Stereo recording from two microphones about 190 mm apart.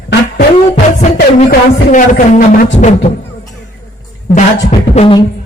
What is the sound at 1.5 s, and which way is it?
Speech, 40° left (ahead or behind).